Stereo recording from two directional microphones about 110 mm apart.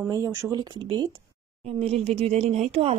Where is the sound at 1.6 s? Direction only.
70° right (ahead or behind).